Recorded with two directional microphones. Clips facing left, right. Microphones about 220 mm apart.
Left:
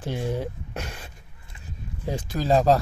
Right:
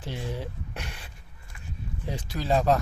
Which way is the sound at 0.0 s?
50° left (ahead or behind).